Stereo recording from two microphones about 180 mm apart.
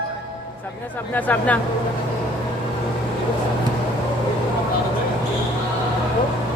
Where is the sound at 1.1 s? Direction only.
10° left (ahead or behind).